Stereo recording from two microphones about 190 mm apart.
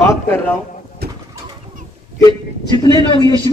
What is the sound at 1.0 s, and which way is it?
Bird, 55° right (ahead or behind).